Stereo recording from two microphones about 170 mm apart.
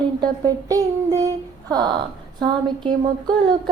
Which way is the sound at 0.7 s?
20° right (ahead or behind).